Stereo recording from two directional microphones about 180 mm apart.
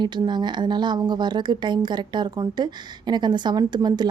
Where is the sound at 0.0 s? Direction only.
25° right (ahead or behind).